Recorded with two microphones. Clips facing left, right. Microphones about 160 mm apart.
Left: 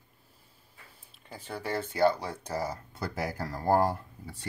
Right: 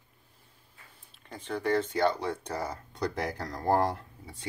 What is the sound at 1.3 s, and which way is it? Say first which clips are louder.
Speech: right 5 dB; 5° left (ahead or behind).